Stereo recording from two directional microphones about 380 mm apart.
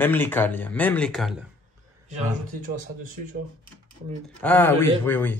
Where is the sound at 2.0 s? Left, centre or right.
Centre.